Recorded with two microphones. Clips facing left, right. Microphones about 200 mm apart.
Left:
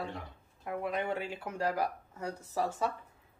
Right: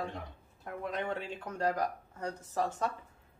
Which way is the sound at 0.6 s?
10° left (ahead or behind).